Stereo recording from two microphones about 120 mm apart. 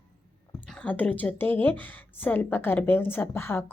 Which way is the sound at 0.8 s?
15° left (ahead or behind).